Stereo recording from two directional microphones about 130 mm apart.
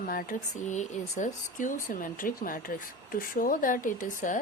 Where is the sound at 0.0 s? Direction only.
90° left.